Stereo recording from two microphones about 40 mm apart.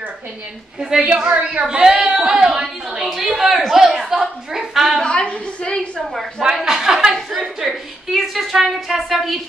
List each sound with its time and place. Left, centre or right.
0.7 s a woman's voice: centre
1.1 s speech: right
3.0 s a woman's voice: centre
3.8 s a sound: centre
5.0 s a woman's voice: left
6.6 s a sound: centre
8.8 s a woman's voice: centre